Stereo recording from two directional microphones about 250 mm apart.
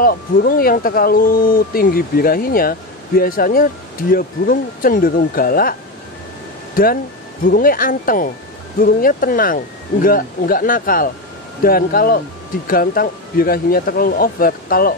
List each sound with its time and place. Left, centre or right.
0.0 s speech: left